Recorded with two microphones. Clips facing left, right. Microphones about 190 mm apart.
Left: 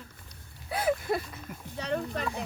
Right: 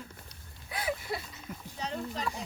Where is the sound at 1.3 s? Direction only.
60° left (ahead or behind).